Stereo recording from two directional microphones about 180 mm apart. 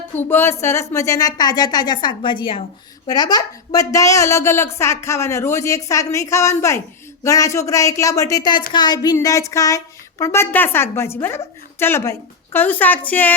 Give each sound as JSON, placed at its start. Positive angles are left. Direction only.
{"t": 0.3, "sound": "a woman's voice", "side_deg": 15}